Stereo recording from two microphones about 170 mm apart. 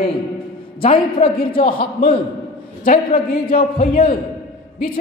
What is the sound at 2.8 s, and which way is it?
Speech, 60° left (ahead or behind).